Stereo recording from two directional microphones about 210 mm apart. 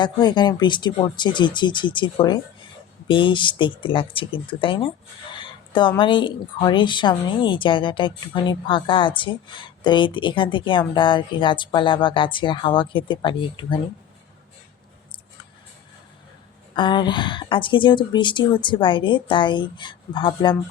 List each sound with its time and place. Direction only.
0.0 s a woman's voice: 20° left (ahead or behind)
5.3 s a sound: 20° left (ahead or behind)
6.0 s a woman's voice: 25° left (ahead or behind)
16.7 s a woman's voice: 20° left (ahead or behind)